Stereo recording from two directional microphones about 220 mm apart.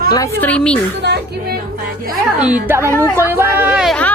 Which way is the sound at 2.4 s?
5° right (ahead or behind).